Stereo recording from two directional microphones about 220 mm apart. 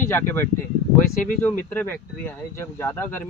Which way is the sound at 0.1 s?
10° left (ahead or behind).